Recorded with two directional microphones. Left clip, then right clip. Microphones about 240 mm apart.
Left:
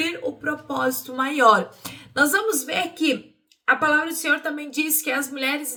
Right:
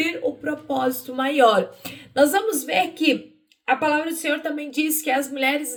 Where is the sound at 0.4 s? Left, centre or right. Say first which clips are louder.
Left 2 dB; centre.